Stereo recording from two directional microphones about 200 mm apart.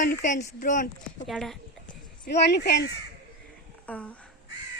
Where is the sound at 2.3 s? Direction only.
55° left (ahead or behind).